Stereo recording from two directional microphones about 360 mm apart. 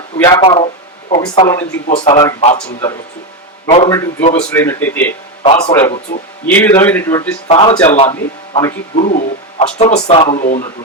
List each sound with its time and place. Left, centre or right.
0.2 s a man's voice: centre
5.4 s speech: centre